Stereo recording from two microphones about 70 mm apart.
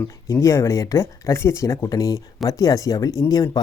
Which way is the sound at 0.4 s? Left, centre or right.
Left.